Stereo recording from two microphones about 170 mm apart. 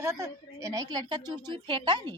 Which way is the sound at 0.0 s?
15° right (ahead or behind).